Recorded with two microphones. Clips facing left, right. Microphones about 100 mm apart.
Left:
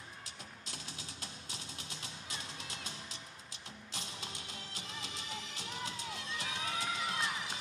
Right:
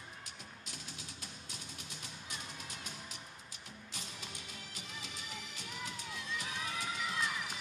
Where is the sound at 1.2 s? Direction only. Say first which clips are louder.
Left 2 dB; 90° left.